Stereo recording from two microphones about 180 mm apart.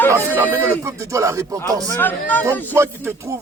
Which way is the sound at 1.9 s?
10° left (ahead or behind).